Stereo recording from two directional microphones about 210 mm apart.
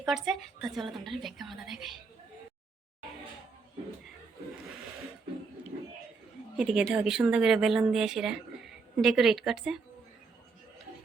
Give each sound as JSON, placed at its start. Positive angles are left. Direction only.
{"t": 0.0, "sound": "speech", "side_deg": 0}
{"t": 6.6, "sound": "speech", "side_deg": -5}